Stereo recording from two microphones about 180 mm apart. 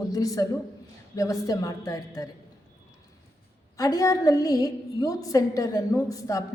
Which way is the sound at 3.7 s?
20° left (ahead or behind).